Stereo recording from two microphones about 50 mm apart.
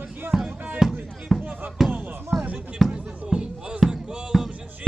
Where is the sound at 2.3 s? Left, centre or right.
Centre.